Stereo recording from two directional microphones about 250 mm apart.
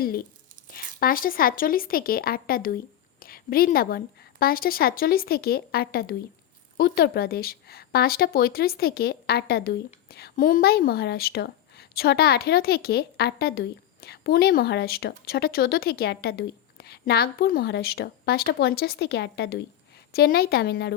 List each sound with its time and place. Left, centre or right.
0.7 s a woman's voice: left